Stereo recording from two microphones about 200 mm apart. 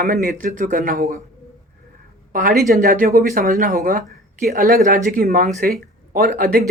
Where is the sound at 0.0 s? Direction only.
40° right (ahead or behind).